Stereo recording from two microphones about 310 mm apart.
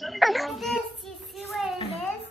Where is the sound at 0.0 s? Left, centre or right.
Centre.